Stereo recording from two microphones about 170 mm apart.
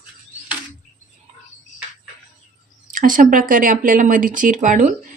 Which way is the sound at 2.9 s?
55° right (ahead or behind).